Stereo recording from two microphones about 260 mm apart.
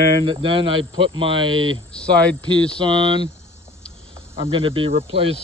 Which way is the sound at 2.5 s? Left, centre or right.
Centre.